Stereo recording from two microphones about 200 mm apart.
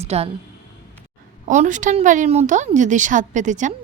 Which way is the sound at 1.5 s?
40° right (ahead or behind).